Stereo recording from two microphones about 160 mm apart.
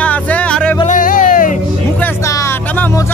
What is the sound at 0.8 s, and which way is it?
Music, 55° left (ahead or behind).